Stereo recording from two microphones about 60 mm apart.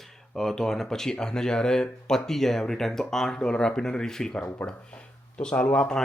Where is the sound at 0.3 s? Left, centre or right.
Centre.